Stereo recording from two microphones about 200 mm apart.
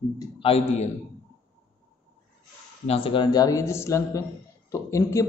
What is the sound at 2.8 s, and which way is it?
A man's voice, 30° left (ahead or behind).